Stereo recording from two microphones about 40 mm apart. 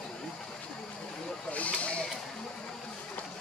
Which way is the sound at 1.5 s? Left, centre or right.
Left.